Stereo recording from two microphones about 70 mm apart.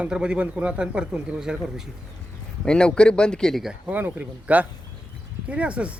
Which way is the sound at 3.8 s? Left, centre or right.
Right.